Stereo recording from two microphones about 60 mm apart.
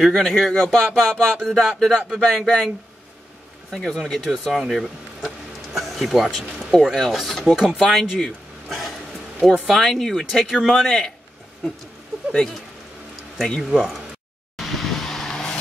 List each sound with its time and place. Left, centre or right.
0.0 s speech: centre
3.7 s speech: centre
7.4 s speech: centre
13.6 s speech: centre
14.6 s vehicle: centre